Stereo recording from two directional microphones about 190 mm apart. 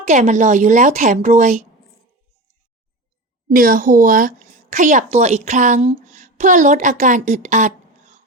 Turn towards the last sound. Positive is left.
turn(degrees=-40)  # may be behind; listen again after turning